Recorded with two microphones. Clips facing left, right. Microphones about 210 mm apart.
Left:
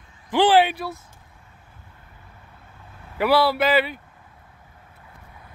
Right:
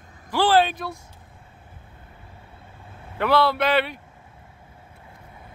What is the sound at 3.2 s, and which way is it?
Speech, 5° left (ahead or behind).